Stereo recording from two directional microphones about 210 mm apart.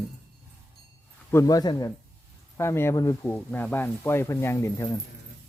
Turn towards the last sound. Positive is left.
turn(degrees=15)  # may be behind; listen again after turning